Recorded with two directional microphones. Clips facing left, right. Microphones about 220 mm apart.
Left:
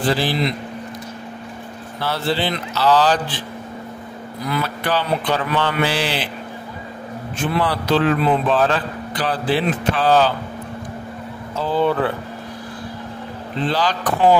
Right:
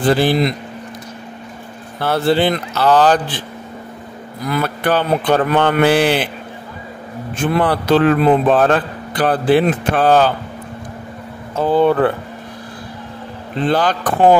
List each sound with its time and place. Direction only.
0.0 s a man's voice: 55° right (ahead or behind)
2.0 s a man's voice: 55° right (ahead or behind)
4.5 s a man's voice: 50° right (ahead or behind)
7.5 s a man's voice: 55° right (ahead or behind)
11.5 s a man's voice: 50° right (ahead or behind)
13.7 s a man's voice: 55° right (ahead or behind)